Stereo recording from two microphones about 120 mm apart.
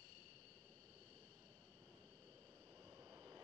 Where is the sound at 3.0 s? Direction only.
35° right (ahead or behind).